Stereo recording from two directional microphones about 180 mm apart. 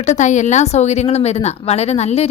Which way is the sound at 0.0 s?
40° left (ahead or behind).